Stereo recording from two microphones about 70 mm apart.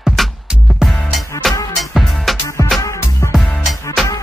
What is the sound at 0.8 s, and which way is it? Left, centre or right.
Music, centre.